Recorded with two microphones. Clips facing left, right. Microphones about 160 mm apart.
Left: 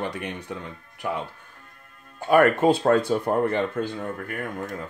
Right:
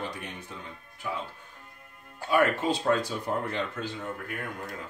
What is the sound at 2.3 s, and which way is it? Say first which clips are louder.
Speech: left 7 dB; 60° left (ahead or behind).